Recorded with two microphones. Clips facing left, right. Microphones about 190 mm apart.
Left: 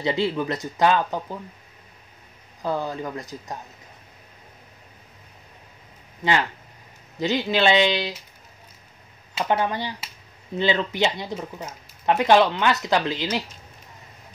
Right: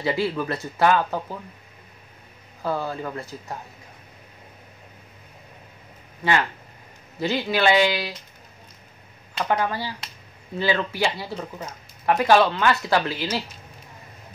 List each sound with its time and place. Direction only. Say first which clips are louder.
0.0 s speech: left 1 dB; 20° left (ahead or behind)
2.6 s speech: even; 15° left (ahead or behind)
7.2 s speech: left 1 dB; 15° left (ahead or behind)
9.5 s speech: left 1 dB; 20° left (ahead or behind)
12.1 s speech: even; 20° left (ahead or behind)